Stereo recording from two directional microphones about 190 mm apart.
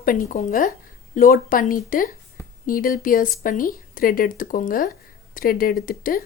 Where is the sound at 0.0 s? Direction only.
50° left (ahead or behind).